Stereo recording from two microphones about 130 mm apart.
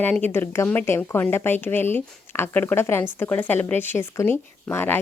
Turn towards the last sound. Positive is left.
turn(degrees=15)  # may be behind; listen again after turning